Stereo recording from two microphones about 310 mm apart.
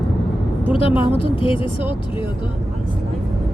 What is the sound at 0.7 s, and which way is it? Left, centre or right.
Speech, centre.